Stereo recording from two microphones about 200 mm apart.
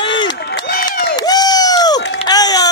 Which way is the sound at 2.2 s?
20° left (ahead or behind).